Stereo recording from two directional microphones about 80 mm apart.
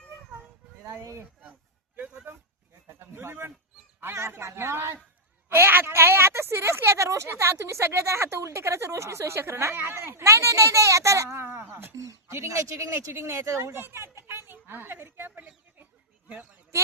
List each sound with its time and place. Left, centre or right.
0.9 s a woman's voice: right
11.9 s a sound: right
12.5 s a woman's voice: right; by 16.6 s centre